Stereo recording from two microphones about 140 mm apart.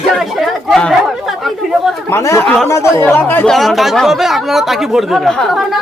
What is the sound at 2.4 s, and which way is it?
Speech, 5° left (ahead or behind).